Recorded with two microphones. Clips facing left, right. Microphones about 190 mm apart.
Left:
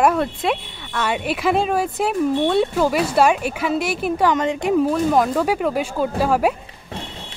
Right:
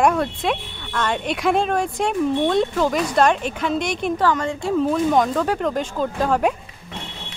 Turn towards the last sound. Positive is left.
turn(degrees=5)  # may be behind; listen again after turning